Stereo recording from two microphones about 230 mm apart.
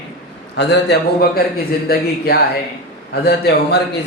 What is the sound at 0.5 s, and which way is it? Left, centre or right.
Speech, left.